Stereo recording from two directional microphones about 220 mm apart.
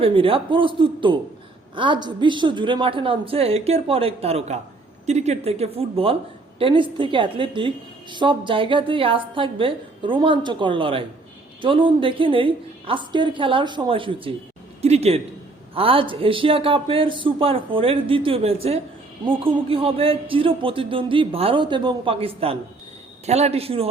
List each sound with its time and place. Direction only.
0.0 s a man's voice: 25° right (ahead or behind)